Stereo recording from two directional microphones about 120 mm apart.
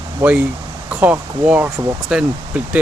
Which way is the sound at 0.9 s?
10° right (ahead or behind).